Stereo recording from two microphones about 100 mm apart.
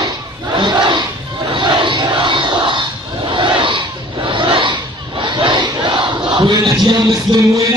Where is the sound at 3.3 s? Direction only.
55° right (ahead or behind).